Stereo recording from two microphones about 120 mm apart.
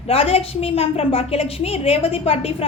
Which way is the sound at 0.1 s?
55° left (ahead or behind).